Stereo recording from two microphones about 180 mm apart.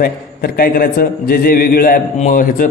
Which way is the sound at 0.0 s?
55° left (ahead or behind).